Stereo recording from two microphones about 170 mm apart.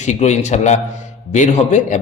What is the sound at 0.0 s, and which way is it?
A man's voice, 45° left (ahead or behind).